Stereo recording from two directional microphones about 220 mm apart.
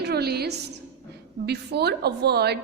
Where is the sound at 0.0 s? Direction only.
45° right (ahead or behind).